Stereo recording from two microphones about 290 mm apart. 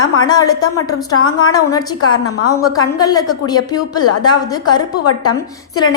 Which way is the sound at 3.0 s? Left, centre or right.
Centre.